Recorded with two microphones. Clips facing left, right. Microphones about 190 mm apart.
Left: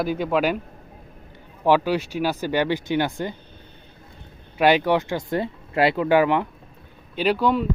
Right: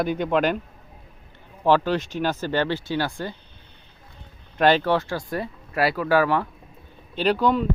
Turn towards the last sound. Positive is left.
turn(degrees=10)  # may be behind; listen again after turning